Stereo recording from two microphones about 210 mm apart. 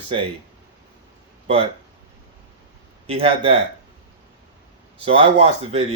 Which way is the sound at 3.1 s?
25° right (ahead or behind).